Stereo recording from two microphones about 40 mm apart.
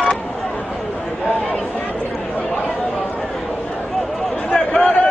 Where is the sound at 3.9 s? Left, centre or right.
Centre.